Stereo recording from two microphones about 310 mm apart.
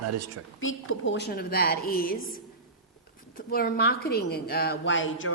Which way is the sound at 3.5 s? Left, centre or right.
Left.